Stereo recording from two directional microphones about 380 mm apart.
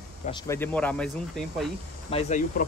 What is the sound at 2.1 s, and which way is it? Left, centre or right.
Speech, centre.